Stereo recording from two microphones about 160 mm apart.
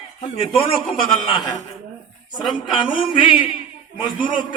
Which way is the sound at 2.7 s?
30° left (ahead or behind).